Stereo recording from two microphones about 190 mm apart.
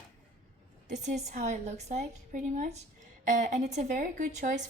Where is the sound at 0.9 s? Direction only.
35° right (ahead or behind).